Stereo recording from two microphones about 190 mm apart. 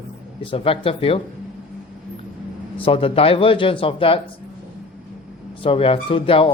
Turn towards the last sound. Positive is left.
turn(degrees=30)  # may be behind; listen again after turning